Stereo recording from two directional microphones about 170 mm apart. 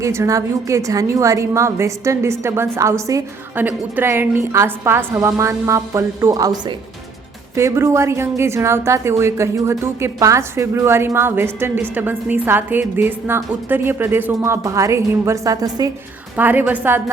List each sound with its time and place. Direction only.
0.0 s a woman's voice: 15° right (ahead or behind)